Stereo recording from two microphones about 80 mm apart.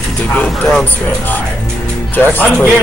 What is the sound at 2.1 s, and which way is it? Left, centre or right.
Speech, centre.